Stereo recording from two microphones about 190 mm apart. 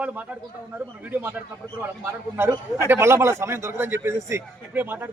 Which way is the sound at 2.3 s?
15° right (ahead or behind).